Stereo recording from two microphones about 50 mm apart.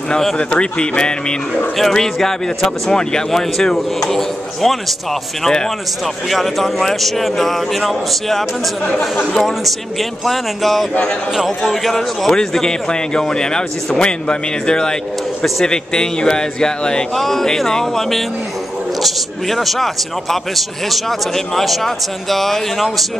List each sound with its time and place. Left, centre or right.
0.1 s speech: centre
0.4 s a man's voice: left
1.8 s speech: centre
6.2 s speech: centre
9.5 s speech: centre
17.1 s speech: centre